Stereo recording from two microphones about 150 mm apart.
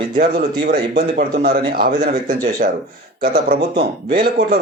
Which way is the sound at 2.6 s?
70° right (ahead or behind).